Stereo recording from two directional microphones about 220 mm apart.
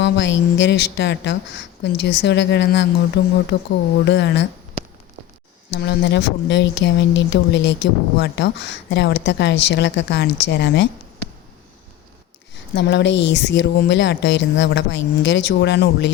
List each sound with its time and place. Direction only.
0.0 s speech: 55° left (ahead or behind)
5.7 s speech: 50° left (ahead or behind)
12.7 s speech: 55° left (ahead or behind)